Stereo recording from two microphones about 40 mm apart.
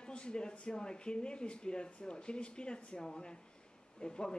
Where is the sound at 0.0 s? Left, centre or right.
Left.